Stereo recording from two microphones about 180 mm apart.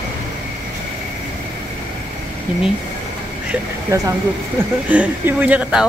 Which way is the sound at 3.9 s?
15° right (ahead or behind).